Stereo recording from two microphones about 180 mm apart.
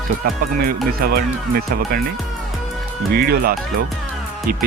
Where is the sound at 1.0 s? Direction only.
55° right (ahead or behind).